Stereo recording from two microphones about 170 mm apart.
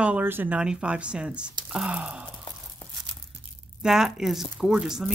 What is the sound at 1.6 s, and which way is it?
Gasp, 5° right (ahead or behind).